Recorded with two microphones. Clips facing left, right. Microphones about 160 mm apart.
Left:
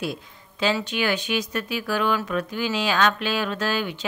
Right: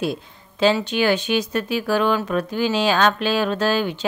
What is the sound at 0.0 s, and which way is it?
Speech, 30° right (ahead or behind).